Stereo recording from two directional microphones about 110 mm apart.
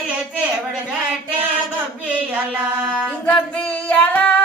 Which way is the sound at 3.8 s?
15° left (ahead or behind).